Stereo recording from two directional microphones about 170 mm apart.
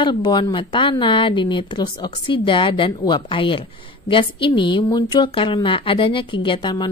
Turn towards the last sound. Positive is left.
turn(degrees=25)  # may be behind; listen again after turning